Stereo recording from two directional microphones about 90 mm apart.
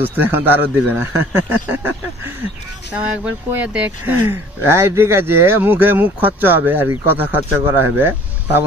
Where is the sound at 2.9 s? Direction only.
15° right (ahead or behind).